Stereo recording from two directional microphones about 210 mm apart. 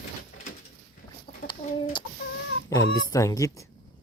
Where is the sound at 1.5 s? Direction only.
20° left (ahead or behind).